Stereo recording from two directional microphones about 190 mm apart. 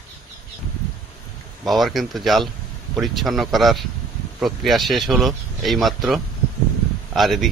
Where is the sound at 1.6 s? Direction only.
Centre (ahead or behind).